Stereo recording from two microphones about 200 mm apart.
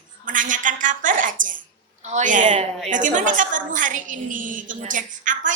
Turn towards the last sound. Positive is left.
turn(degrees=-40)  # may be behind; listen again after turning